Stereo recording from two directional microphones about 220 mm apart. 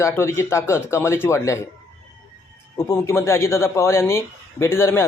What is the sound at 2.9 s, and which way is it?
A man's voice, 10° left (ahead or behind).